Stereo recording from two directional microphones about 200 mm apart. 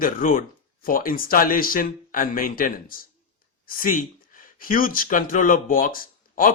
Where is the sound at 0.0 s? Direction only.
45° left (ahead or behind).